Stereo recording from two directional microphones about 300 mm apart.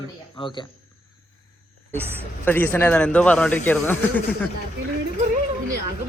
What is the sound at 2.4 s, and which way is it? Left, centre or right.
A man's voice, centre.